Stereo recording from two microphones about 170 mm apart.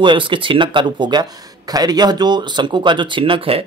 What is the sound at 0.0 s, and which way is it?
Speech, 30° right (ahead or behind).